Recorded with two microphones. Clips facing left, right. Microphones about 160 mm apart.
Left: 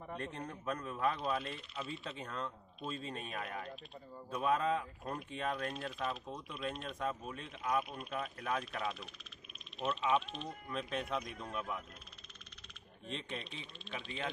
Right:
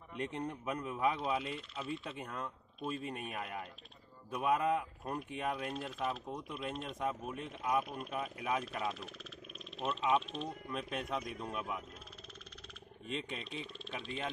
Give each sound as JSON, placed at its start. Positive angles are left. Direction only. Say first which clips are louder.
{"t": 0.2, "sound": "speech", "louder": "right 4 dB", "side_deg": -15}
{"t": 6.2, "sound": "speech", "louder": "right 1 dB", "side_deg": -15}
{"t": 13.1, "sound": "speech", "louder": "right 2 dB", "side_deg": -5}